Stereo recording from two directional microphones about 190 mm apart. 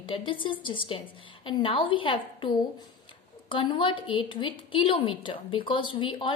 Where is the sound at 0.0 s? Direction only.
25° left (ahead or behind).